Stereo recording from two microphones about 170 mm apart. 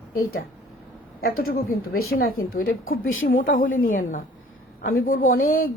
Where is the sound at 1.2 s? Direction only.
60° left (ahead or behind).